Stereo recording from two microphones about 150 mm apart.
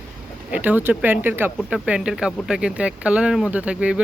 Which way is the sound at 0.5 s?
10° right (ahead or behind).